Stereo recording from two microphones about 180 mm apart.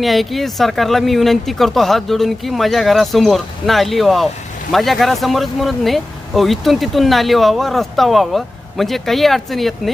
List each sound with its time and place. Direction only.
0.0 s speech: centre (ahead or behind)